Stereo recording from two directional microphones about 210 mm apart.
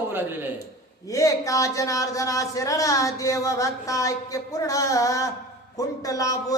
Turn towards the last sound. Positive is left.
turn(degrees=15)  # may be behind; listen again after turning